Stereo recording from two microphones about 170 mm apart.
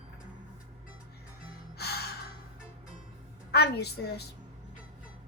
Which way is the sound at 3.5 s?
75° left (ahead or behind).